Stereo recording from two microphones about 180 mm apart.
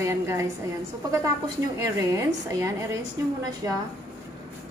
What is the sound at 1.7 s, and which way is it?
A woman's voice, 15° right (ahead or behind).